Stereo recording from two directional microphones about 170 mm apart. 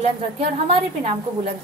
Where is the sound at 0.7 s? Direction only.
35° right (ahead or behind).